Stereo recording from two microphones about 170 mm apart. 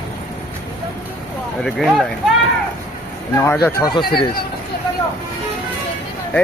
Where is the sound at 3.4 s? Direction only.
15° left (ahead or behind).